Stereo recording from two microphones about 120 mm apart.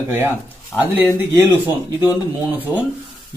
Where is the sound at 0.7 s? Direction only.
15° right (ahead or behind).